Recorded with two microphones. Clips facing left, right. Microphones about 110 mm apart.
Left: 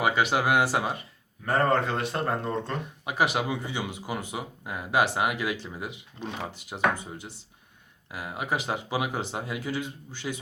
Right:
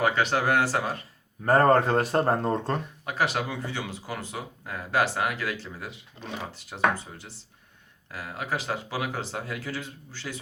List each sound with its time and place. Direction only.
0.0 s speech: 10° left (ahead or behind)
1.5 s speech: 40° right (ahead or behind)
3.0 s speech: 15° left (ahead or behind)